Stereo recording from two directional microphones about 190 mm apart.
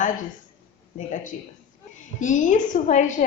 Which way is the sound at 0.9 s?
40° left (ahead or behind).